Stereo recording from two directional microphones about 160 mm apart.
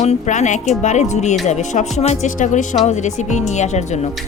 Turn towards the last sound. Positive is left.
turn(degrees=45)  # may be behind; listen again after turning